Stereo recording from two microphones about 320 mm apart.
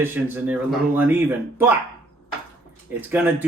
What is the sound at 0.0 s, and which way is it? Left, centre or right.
Speech, centre.